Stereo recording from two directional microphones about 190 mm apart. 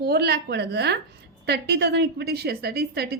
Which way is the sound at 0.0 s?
55° right (ahead or behind).